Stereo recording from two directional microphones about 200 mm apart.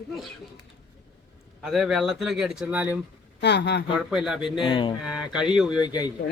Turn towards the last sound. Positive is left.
turn(degrees=20)  # may be behind; listen again after turning